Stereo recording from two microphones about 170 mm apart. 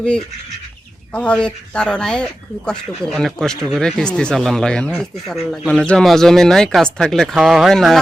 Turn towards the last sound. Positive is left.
turn(degrees=0)  # may be behind; listen again after turning